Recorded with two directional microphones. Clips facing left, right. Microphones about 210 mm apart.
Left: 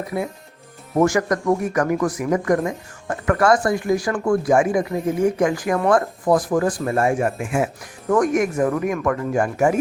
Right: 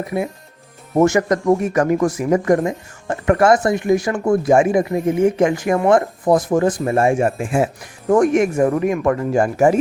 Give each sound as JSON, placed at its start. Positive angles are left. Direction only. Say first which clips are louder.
{"t": 0.9, "sound": "speech", "louder": "right 3 dB", "side_deg": -25}